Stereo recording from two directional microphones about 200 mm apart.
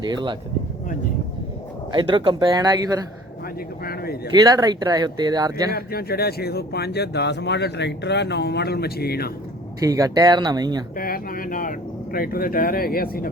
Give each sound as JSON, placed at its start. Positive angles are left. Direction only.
{"t": 0.0, "sound": "speech", "side_deg": -20}
{"t": 1.9, "sound": "speech", "side_deg": -25}
{"t": 3.8, "sound": "speech", "side_deg": 50}
{"t": 4.4, "sound": "speech", "side_deg": -20}
{"t": 5.7, "sound": "speech", "side_deg": 50}
{"t": 9.8, "sound": "speech", "side_deg": -20}
{"t": 10.9, "sound": "speech", "side_deg": 45}